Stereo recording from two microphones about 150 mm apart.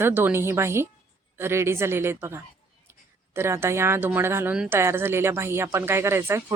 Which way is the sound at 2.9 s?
15° right (ahead or behind).